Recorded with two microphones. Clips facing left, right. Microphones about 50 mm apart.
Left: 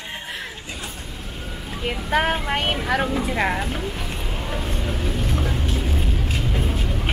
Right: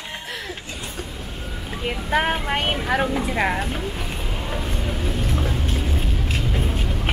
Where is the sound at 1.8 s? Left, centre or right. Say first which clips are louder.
Even; centre.